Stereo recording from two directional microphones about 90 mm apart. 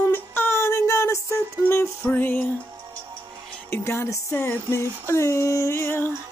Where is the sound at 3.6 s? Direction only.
30° left (ahead or behind).